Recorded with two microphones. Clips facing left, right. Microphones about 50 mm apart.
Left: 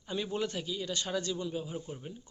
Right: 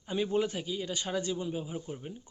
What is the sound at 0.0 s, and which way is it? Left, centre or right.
Speech, centre.